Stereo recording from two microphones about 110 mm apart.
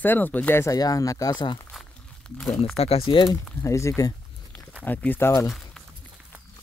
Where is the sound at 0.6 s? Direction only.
35° left (ahead or behind).